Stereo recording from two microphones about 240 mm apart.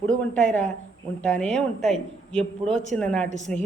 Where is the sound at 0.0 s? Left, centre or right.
Centre.